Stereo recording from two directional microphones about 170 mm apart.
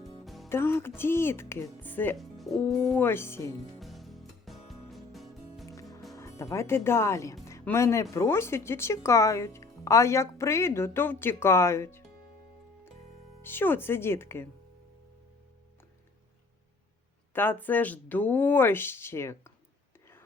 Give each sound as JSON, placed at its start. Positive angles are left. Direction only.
{"t": 0.0, "sound": "music", "side_deg": 0}
{"t": 0.4, "sound": "speech", "side_deg": 15}
{"t": 3.0, "sound": "speech", "side_deg": 15}
{"t": 3.8, "sound": "music", "side_deg": 0}
{"t": 6.1, "sound": "speech", "side_deg": 15}
{"t": 13.4, "sound": "speech", "side_deg": 15}
{"t": 17.3, "sound": "speech", "side_deg": 10}